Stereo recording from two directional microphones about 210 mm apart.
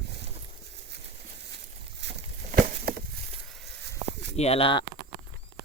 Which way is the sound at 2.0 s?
50° right (ahead or behind).